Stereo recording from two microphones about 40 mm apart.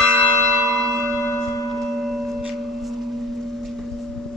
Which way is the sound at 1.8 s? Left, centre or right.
Centre.